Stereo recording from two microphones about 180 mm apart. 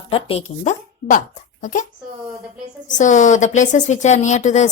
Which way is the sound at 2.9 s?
45° left (ahead or behind).